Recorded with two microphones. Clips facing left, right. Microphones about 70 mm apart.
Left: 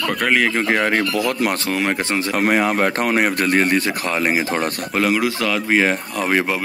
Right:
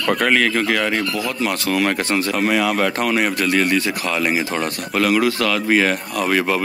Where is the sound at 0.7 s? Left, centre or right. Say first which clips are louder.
Left 2 dB; left.